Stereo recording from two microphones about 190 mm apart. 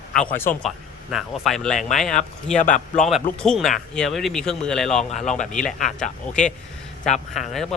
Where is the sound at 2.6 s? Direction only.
40° left (ahead or behind).